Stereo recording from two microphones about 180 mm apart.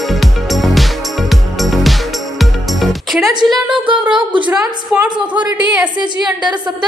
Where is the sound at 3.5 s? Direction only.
5° right (ahead or behind).